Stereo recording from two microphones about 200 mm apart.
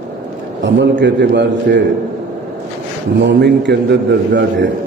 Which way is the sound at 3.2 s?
60° right (ahead or behind).